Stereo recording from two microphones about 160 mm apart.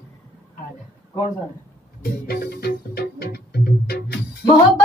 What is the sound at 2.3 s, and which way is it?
Music, 80° left.